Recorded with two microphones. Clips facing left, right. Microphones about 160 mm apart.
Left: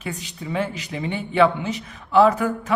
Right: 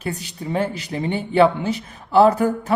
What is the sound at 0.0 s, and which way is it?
Speech, 35° right (ahead or behind).